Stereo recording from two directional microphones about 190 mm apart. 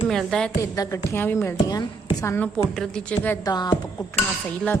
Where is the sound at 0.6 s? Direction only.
15° left (ahead or behind).